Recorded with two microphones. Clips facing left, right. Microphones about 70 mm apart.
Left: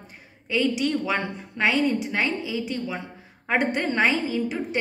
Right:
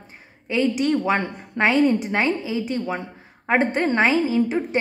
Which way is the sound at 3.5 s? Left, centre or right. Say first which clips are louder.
Right 4 dB; right.